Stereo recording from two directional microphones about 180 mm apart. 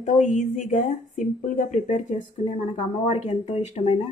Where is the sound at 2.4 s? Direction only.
30° left (ahead or behind).